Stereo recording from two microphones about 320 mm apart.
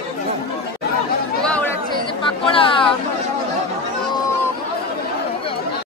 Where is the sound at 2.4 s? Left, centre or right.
Centre.